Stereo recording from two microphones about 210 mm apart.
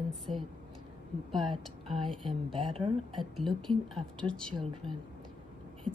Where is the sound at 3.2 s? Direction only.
Centre (ahead or behind).